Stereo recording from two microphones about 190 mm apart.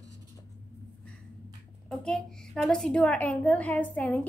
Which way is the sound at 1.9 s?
Centre (ahead or behind).